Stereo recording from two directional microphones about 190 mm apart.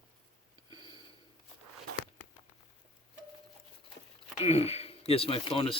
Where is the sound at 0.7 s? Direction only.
25° right (ahead or behind).